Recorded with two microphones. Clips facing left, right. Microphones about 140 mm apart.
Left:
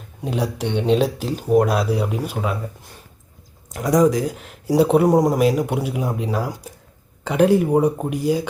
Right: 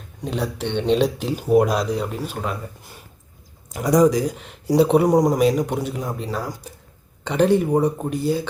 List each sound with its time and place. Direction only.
0.2 s speech: 10° left (ahead or behind)
3.7 s speech: centre (ahead or behind)